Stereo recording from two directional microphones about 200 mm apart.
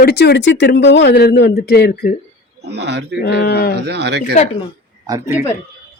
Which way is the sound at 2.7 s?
55° right (ahead or behind).